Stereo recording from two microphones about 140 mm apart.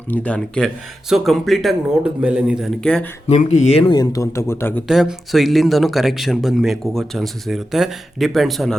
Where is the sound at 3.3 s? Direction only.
50° left (ahead or behind).